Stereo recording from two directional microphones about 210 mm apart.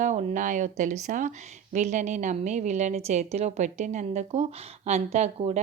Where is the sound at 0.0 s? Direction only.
35° right (ahead or behind).